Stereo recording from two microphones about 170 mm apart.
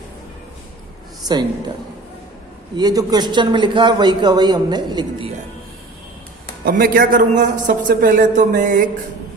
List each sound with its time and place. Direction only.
1.3 s a man's voice: 25° right (ahead or behind)
2.7 s a man's voice: 20° right (ahead or behind)
6.7 s a man's voice: 55° right (ahead or behind)